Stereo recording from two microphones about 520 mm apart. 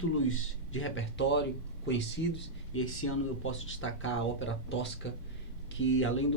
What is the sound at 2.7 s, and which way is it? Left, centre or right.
Speech, left.